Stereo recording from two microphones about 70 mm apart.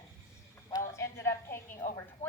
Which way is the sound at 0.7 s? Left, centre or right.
Left.